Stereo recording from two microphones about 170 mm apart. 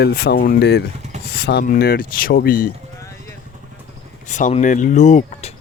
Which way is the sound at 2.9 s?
15° left (ahead or behind).